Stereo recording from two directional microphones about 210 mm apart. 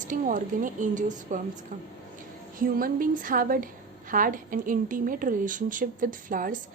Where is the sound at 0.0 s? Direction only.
40° right (ahead or behind).